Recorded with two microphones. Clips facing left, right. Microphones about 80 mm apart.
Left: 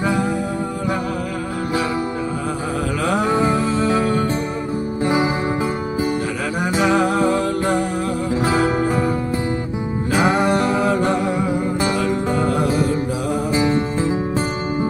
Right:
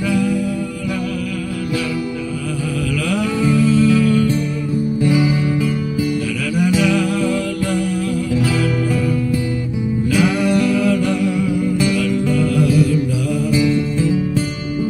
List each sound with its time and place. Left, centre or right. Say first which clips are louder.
0.0 s music: right 2 dB; left
3.1 s music: left 1 dB; left
10.1 s music: even; left